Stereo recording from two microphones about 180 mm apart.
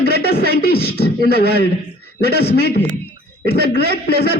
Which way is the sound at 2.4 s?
60° left (ahead or behind).